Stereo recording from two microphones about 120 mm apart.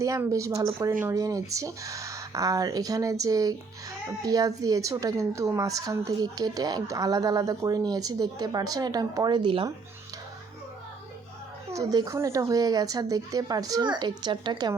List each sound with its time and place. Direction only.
0.3 s a woman's voice: 25° right (ahead or behind); by 9.6 s 45° right (ahead or behind)
11.7 s a woman's voice: 30° right (ahead or behind)